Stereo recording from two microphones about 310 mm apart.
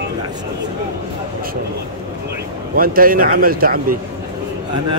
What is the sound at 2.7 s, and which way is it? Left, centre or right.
A man's voice, right.